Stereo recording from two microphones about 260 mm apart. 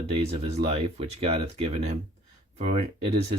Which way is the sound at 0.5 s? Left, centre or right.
Right.